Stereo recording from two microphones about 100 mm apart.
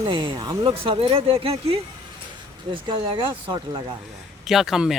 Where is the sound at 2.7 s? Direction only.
60° right (ahead or behind).